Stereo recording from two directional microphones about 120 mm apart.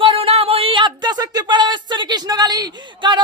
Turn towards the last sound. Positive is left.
turn(degrees=-40)  # may be behind; listen again after turning